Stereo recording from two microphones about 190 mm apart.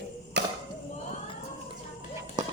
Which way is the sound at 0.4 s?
65° right (ahead or behind).